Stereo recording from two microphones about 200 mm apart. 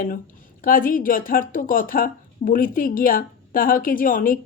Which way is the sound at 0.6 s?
45° left (ahead or behind).